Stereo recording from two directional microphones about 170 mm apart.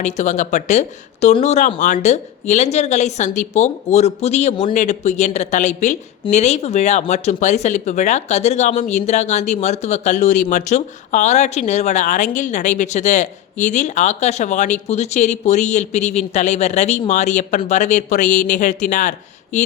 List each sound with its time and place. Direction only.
0.0 s speech: 45° left (ahead or behind)